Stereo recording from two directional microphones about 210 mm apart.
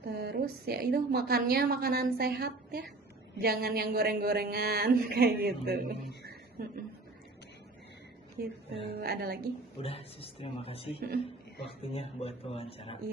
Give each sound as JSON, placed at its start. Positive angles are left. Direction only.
{"t": 0.0, "sound": "a woman's voice", "side_deg": -50}
{"t": 6.6, "sound": "a sound", "side_deg": -40}
{"t": 8.4, "sound": "a woman's voice", "side_deg": -50}
{"t": 9.8, "sound": "a man's voice", "side_deg": 25}